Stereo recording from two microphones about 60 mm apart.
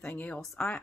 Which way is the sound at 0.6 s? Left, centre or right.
Left.